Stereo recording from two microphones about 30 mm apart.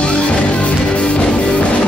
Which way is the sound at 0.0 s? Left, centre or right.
Left.